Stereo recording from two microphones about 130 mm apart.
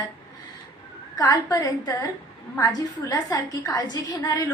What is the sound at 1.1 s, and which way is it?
A woman's voice, 30° left (ahead or behind).